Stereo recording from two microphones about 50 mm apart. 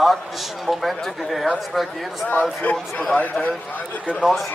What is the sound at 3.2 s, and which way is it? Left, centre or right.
Speech, left.